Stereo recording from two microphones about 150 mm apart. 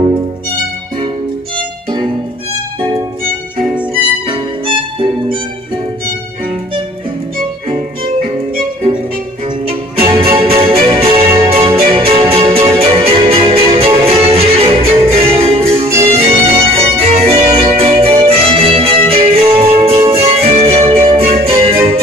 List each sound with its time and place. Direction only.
4.3 s music: 35° right (ahead or behind)
9.7 s music: 40° right (ahead or behind)